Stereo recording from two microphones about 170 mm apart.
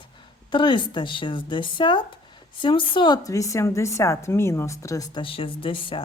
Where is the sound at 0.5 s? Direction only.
30° left (ahead or behind).